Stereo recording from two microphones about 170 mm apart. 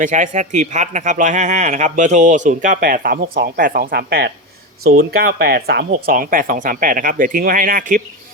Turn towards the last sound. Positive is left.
turn(degrees=-55)  # may be behind; listen again after turning